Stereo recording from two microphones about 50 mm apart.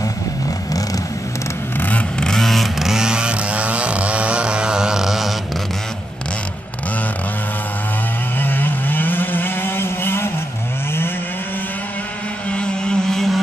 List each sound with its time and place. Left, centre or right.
1.8 s vehicle: left
2.1 s vehicle: centre
2.9 s chainsaw: centre
8.4 s vehicle: left
12.4 s motorboat: left
13.1 s vehicle: centre